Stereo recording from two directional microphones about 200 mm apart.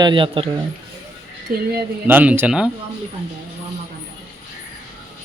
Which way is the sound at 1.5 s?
45° right (ahead or behind).